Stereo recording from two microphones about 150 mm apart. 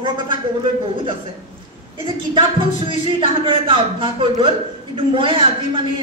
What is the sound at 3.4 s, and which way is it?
A man's voice, 35° right (ahead or behind).